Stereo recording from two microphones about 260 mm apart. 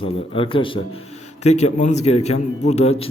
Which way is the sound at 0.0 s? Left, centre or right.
Centre.